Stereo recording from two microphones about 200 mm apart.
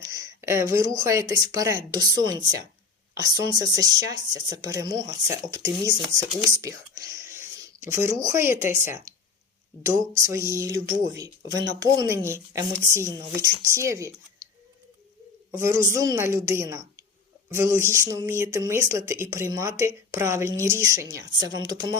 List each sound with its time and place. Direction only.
0.0 s speech: 15° right (ahead or behind)
15.5 s speech: 15° right (ahead or behind)